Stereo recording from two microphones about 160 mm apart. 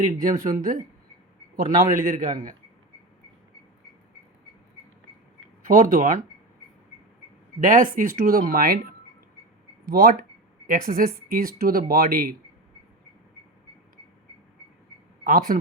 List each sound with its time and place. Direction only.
0.2 s speech: 55° right (ahead or behind)
5.6 s speech: 60° right (ahead or behind)
7.6 s speech: 55° right (ahead or behind)
15.2 s speech: 65° right (ahead or behind)